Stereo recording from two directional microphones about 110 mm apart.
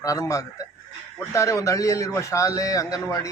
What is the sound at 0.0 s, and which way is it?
A man's voice, 30° left (ahead or behind).